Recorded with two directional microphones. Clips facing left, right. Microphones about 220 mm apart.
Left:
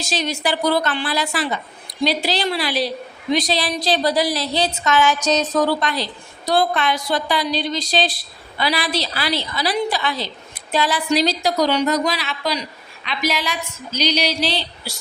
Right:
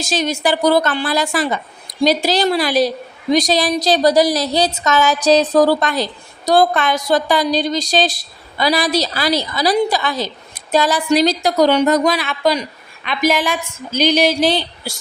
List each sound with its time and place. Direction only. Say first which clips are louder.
0.0 s a woman's voice: right 5 dB; 45° right (ahead or behind)